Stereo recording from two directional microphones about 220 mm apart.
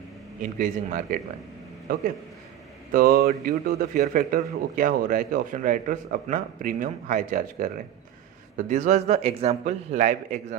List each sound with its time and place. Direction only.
0.6 s a man's voice: 35° right (ahead or behind)
2.9 s a man's voice: 45° right (ahead or behind)